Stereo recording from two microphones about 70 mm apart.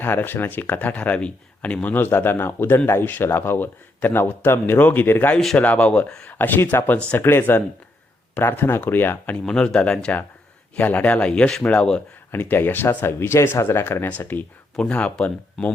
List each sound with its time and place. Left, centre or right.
0.0 s speech: left; by 6.3 s centre
6.3 s speech: left
9.3 s speech: centre
10.8 s speech: left
12.3 s speech: left
14.8 s speech: centre